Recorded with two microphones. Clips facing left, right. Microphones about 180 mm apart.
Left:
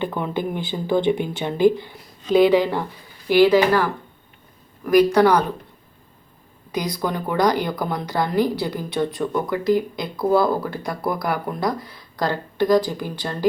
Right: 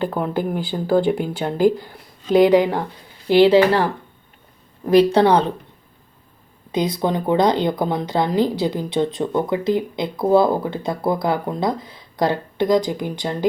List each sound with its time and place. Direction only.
0.0 s speech: 10° right (ahead or behind); by 5.5 s 25° right (ahead or behind)
6.7 s speech: 25° right (ahead or behind)